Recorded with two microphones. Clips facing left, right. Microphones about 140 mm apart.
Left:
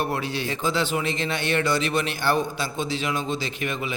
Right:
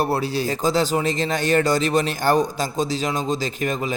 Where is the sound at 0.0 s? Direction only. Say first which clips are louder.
Right 5 dB; 35° right (ahead or behind).